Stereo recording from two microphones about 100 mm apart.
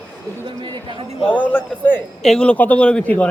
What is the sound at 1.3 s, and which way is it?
Speech, 15° left (ahead or behind).